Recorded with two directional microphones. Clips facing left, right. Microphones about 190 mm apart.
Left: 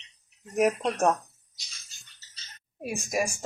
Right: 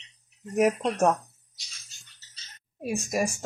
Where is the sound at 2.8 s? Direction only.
Centre (ahead or behind).